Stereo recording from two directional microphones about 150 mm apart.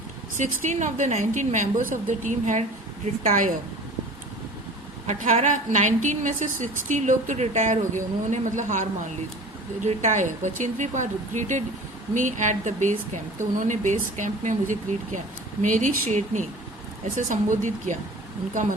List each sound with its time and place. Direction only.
0.3 s a woman's voice: 55° right (ahead or behind)
5.0 s a woman's voice: 55° right (ahead or behind)